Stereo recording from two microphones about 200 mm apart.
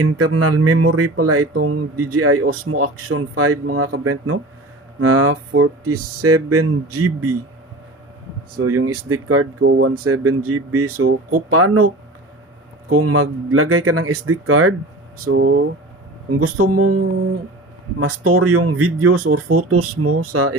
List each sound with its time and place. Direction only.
0.2 s speech: 90° right
8.5 s speech: 90° right
9.6 s speech: 55° right (ahead or behind); by 11.9 s 90° right
12.9 s speech: 90° right
15.4 s speech: 60° right (ahead or behind)
16.3 s speech: 90° right